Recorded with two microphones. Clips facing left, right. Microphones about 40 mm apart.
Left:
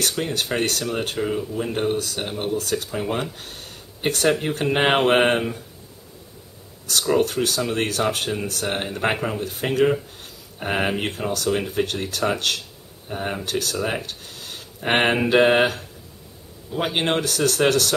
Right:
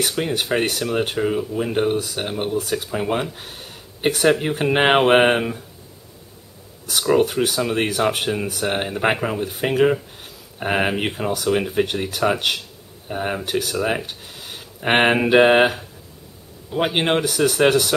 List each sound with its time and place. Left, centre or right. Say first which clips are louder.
0.0 s speech: right 2 dB; centre
6.9 s speech: right 2 dB; centre